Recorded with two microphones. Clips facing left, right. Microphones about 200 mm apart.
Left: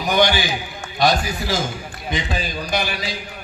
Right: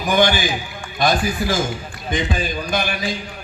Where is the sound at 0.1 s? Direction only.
50° right (ahead or behind).